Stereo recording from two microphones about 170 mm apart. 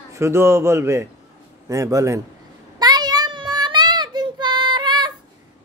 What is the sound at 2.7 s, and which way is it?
Child singing, 25° right (ahead or behind).